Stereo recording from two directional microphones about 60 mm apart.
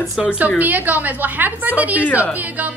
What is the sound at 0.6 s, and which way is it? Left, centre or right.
A woman's voice, right.